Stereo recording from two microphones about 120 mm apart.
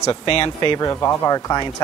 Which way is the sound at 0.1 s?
45° left (ahead or behind).